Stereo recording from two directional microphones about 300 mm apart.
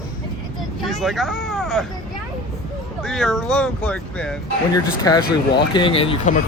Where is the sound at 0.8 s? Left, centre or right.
Centre.